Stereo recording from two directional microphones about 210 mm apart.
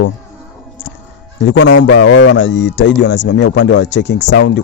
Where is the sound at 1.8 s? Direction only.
65° left (ahead or behind).